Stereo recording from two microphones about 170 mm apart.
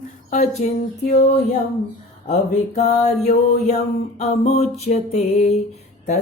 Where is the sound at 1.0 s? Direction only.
40° left (ahead or behind).